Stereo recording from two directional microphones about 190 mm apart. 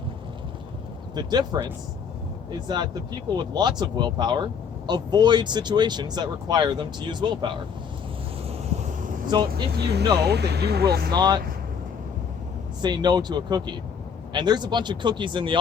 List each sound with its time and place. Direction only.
1.1 s speech: 20° right (ahead or behind)
9.3 s speech: 25° right (ahead or behind)
10.2 s speech: 60° right (ahead or behind)
11.1 s speech: 20° right (ahead or behind)
12.8 s speech: 20° right (ahead or behind)